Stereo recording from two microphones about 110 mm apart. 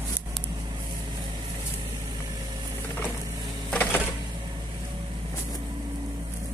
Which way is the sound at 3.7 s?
15° left (ahead or behind).